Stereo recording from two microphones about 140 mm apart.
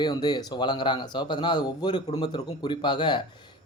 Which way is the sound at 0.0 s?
30° left (ahead or behind).